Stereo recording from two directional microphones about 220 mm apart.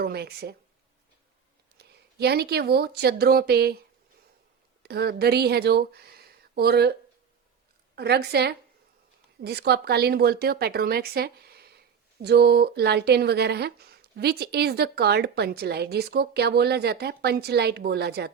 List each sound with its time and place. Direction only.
0.0 s speech: 45° right (ahead or behind)
1.8 s speech: 45° right (ahead or behind)
4.8 s speech: 45° right (ahead or behind)
7.9 s speech: 45° right (ahead or behind)